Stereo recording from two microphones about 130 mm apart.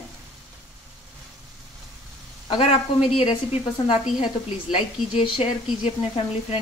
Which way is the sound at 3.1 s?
45° left (ahead or behind).